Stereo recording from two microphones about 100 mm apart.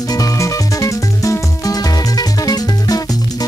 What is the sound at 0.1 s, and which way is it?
Music, 35° left (ahead or behind).